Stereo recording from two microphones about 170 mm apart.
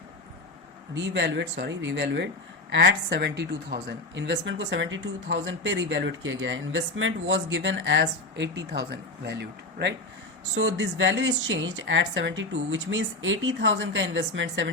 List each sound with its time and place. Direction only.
0.9 s speech: 90° right